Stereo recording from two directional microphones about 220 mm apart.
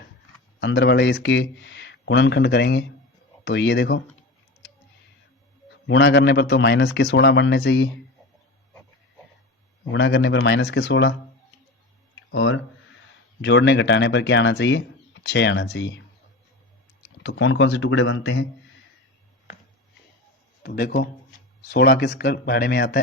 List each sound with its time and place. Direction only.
0.6 s speech: 50° left (ahead or behind)
5.9 s speech: 50° left (ahead or behind)
9.9 s speech: 55° left (ahead or behind)
12.3 s speech: 60° left (ahead or behind)
17.2 s speech: 55° left (ahead or behind)
20.6 s a man's voice: 45° left (ahead or behind)